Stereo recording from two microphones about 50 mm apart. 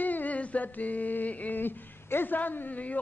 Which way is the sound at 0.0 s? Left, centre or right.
Left.